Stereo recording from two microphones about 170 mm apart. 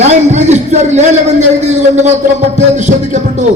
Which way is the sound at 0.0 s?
40° right (ahead or behind).